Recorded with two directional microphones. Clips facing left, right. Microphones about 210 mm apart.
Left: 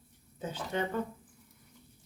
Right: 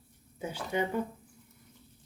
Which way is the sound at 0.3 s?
10° right (ahead or behind).